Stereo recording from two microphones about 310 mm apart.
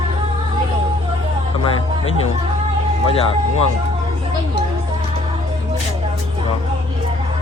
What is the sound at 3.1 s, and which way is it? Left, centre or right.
Speech, centre.